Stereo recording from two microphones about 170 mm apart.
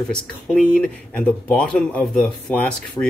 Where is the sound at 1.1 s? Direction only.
5° left (ahead or behind).